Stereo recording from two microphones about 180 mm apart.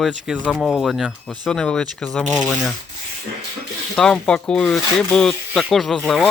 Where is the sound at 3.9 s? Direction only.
5° left (ahead or behind).